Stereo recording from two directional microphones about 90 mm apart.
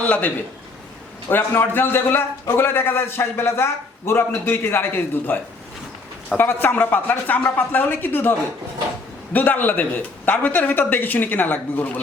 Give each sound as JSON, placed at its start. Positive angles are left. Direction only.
{"t": 0.0, "sound": "a man's voice", "side_deg": 15}